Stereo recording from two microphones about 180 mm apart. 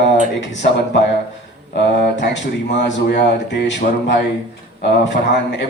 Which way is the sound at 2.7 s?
75° left (ahead or behind).